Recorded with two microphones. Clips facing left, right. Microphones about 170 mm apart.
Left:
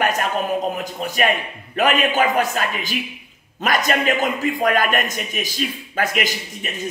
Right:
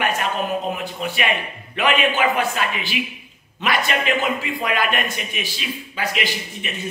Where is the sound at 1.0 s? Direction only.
40° left (ahead or behind).